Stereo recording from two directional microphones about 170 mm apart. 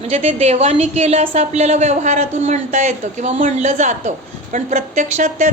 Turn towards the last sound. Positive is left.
turn(degrees=-45)  # may be behind; listen again after turning